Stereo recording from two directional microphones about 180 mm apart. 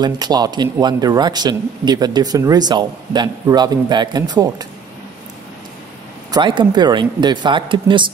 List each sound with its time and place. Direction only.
0.0 s speech: 20° right (ahead or behind)
6.3 s speech: 25° right (ahead or behind)